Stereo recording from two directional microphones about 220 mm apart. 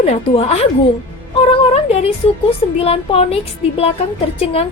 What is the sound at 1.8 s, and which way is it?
A woman's voice, 25° left (ahead or behind).